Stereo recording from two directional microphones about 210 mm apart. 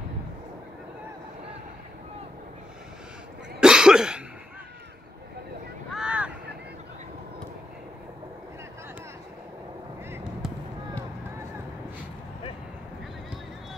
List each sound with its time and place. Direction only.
3.6 s cough: 5° right (ahead or behind)
5.9 s vehicle: 5° right (ahead or behind)